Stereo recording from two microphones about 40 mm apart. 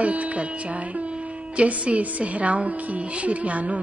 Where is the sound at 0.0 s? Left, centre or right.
Right.